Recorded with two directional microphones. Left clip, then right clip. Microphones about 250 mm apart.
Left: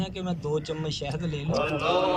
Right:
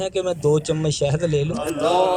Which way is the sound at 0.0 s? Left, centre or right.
Right.